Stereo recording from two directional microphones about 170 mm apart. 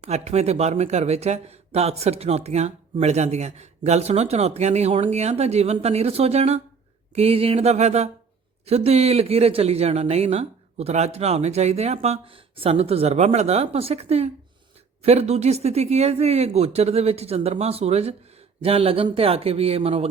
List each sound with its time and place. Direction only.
0.0 s speech: 40° right (ahead or behind)